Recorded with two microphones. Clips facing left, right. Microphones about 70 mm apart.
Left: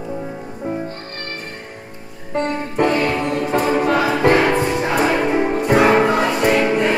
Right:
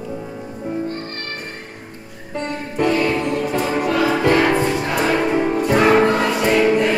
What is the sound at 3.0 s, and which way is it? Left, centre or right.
Music, centre.